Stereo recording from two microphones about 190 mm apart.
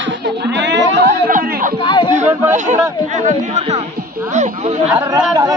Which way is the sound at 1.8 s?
25° left (ahead or behind).